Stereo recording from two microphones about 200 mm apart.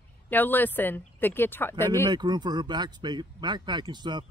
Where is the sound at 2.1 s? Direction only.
20° right (ahead or behind).